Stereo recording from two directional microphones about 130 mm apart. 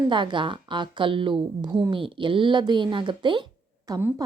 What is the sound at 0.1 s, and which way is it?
A woman's voice, 35° right (ahead or behind).